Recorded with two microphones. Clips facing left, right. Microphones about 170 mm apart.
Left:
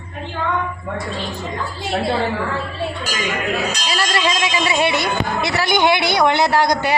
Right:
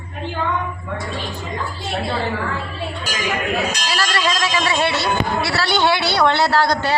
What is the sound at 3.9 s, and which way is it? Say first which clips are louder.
Speech: left 2 dB; 20° left (ahead or behind).